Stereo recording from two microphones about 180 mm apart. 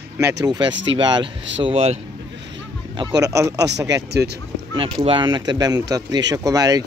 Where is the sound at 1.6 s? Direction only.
35° right (ahead or behind).